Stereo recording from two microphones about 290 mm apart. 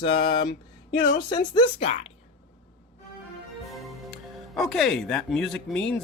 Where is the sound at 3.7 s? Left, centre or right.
Centre.